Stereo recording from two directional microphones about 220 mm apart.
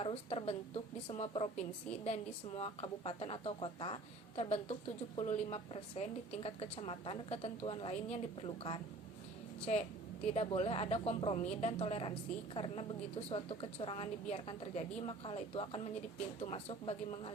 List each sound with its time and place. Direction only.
0.0 s a woman's voice: 25° left (ahead or behind)